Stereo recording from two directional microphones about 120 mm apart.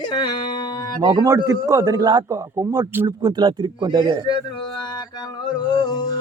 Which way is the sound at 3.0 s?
35° right (ahead or behind).